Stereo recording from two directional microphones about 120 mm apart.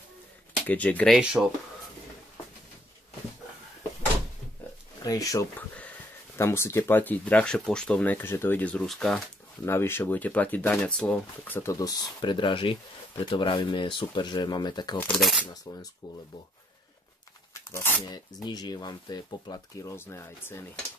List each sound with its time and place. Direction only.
0.7 s speech: 10° left (ahead or behind)
1.1 s speech: 5° right (ahead or behind)
5.0 s speech: 30° left (ahead or behind); by 9.2 s centre (ahead or behind)
9.7 s speech: 20° left (ahead or behind)
11.7 s speech: 35° left (ahead or behind)
15.1 s speech: centre (ahead or behind)
15.7 s speech: 30° left (ahead or behind)
17.6 s speech: 20° left (ahead or behind)
18.1 s speech: 35° left (ahead or behind)